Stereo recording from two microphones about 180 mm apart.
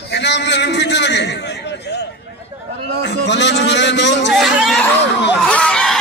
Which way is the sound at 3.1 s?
75° left (ahead or behind).